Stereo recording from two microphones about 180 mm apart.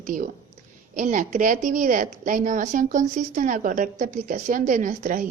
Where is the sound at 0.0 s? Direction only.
45° right (ahead or behind).